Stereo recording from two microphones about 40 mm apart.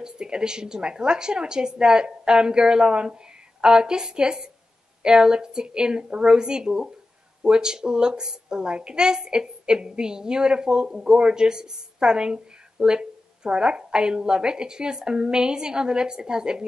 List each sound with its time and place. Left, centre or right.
0.0 s a woman's voice: centre